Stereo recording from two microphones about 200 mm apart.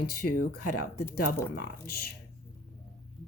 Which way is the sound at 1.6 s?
50° left (ahead or behind).